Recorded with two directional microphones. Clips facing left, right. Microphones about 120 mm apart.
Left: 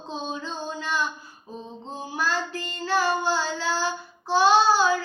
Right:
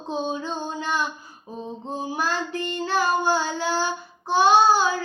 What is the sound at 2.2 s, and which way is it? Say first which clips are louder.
Child singing: left 1 dB; 15° right (ahead or behind).